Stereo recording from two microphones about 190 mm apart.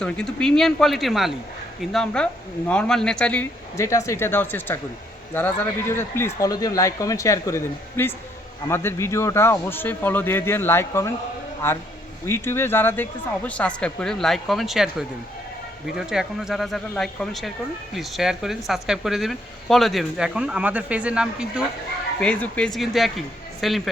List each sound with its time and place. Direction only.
0.0 s speech: 5° left (ahead or behind)
22.2 s speech: 5° left (ahead or behind)